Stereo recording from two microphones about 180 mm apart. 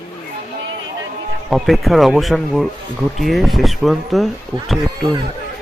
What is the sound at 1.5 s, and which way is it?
A man's voice, centre (ahead or behind).